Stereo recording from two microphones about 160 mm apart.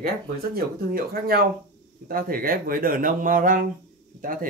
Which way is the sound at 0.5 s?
70° right (ahead or behind).